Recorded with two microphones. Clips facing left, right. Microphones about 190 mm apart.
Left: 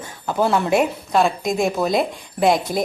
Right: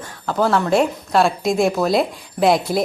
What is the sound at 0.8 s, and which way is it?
A woman's voice, centre (ahead or behind).